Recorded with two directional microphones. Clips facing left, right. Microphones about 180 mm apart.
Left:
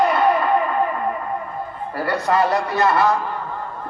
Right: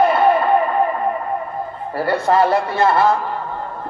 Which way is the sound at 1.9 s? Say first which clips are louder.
Right 4 dB; 30° right (ahead or behind).